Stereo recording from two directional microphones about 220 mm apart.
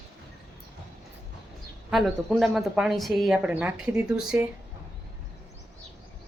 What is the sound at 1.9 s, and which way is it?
A woman's voice, centre (ahead or behind).